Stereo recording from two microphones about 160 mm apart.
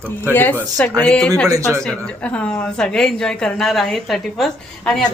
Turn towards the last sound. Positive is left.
turn(degrees=5)  # may be behind; listen again after turning